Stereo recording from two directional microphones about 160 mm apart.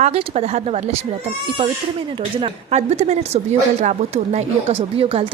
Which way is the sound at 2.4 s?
40° right (ahead or behind).